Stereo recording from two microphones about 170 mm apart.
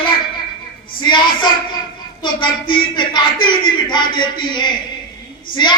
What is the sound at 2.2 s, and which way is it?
Speech, 30° left (ahead or behind).